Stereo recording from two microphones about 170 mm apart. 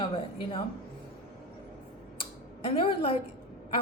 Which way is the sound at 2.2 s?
30° left (ahead or behind).